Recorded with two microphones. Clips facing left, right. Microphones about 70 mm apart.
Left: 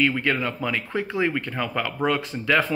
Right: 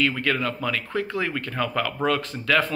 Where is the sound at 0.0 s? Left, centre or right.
Centre.